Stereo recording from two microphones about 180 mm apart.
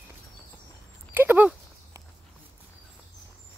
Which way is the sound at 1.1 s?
10° right (ahead or behind).